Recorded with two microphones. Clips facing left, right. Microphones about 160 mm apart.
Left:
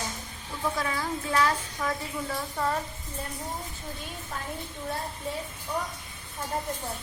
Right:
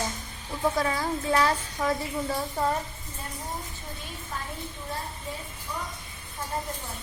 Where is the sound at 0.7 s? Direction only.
35° right (ahead or behind).